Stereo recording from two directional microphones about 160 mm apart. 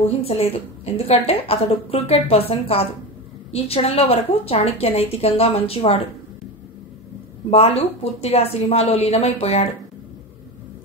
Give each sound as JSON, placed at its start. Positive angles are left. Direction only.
{"t": 0.0, "sound": "a woman's voice", "side_deg": 40}
{"t": 7.5, "sound": "a woman's voice", "side_deg": 40}